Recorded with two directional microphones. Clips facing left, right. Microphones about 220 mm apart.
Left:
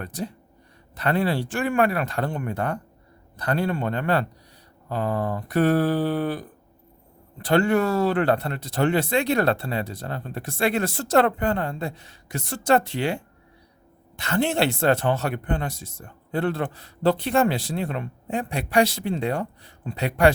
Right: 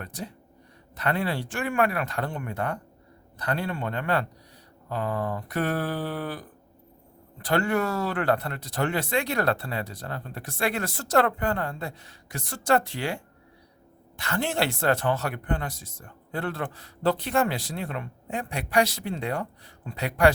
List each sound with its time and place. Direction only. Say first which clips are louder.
0.0 s speech: left 6 dB; 35° left (ahead or behind)
7.4 s speech: left 5 dB; 25° left (ahead or behind)
14.2 s speech: left 5 dB; 25° left (ahead or behind)